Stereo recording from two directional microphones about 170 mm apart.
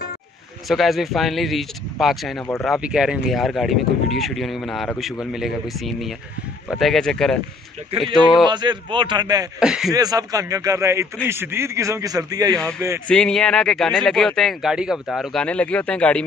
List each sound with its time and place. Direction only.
0.7 s speech: centre (ahead or behind)
8.5 s speech: 25° right (ahead or behind)
9.6 s speech: 5° right (ahead or behind)
9.9 s a man's voice: 20° right (ahead or behind)
13.1 s speech: 5° left (ahead or behind)